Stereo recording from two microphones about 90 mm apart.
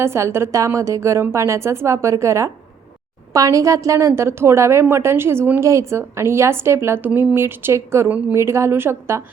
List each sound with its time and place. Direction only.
0.0 s a woman's voice: 30° right (ahead or behind)